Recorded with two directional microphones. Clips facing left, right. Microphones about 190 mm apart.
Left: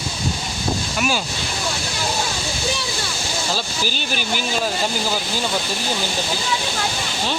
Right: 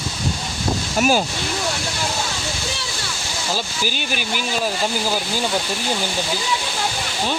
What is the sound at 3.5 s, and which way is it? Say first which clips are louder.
Speech: even; 15° right (ahead or behind).